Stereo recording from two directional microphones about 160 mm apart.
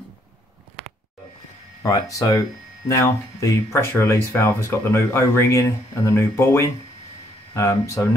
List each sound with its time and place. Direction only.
1.8 s speech: 20° left (ahead or behind)